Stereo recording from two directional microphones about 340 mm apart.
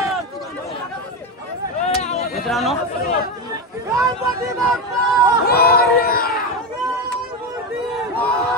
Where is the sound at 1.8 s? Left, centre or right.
Centre.